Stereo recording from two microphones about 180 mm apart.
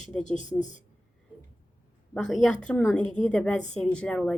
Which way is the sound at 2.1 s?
5° left (ahead or behind).